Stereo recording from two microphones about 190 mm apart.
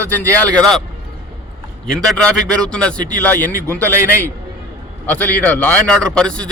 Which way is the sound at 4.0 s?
15° right (ahead or behind).